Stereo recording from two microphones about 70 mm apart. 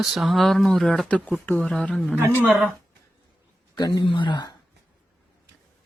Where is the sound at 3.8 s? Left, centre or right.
Left.